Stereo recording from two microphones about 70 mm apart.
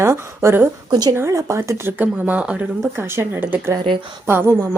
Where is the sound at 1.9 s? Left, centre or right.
Right.